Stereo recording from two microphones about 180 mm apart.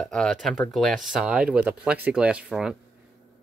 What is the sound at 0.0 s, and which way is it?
Speech, 5° left (ahead or behind).